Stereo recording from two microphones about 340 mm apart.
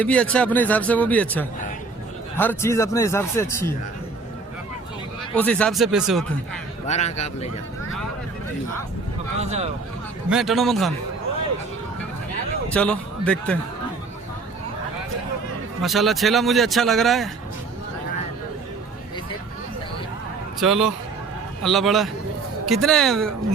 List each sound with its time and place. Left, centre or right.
0.0 s a man's voice: centre
5.4 s speech: centre
6.8 s speech: centre
9.4 s speech: centre
10.2 s speech: centre
12.7 s speech: centre
15.8 s speech: centre
20.6 s speech: centre